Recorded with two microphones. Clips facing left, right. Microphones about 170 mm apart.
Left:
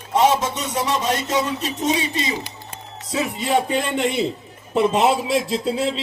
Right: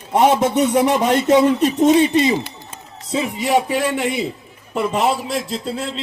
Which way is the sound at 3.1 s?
10° right (ahead or behind).